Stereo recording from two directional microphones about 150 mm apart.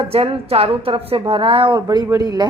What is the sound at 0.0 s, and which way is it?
A woman's voice, 40° right (ahead or behind).